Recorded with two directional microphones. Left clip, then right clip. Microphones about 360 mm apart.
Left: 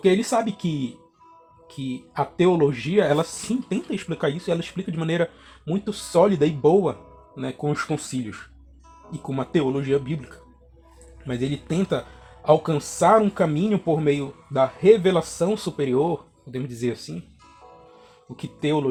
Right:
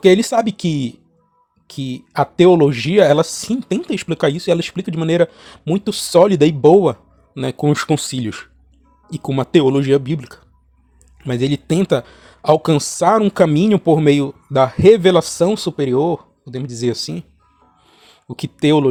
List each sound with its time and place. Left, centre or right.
0.0 s speech: right
18.3 s speech: right